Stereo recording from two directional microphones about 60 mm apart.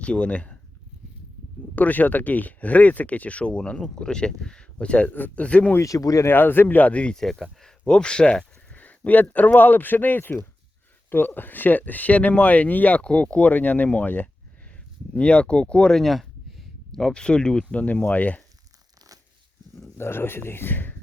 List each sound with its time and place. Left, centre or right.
0.0 s speech: centre
1.7 s speech: left
5.8 s speech: left
6.2 s speech: left
7.2 s speech: centre
8.7 s a sound: left
9.3 s speech: left
16.0 s a sound: centre
17.0 s speech: centre
20.0 s speech: left